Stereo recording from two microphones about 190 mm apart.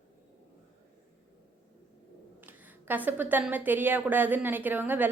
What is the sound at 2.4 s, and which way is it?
A woman's voice, 10° right (ahead or behind).